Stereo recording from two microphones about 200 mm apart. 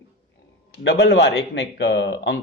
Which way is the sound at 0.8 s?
55° left (ahead or behind).